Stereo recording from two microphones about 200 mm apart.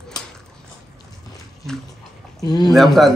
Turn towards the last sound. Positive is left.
turn(degrees=0)  # may be behind; listen again after turning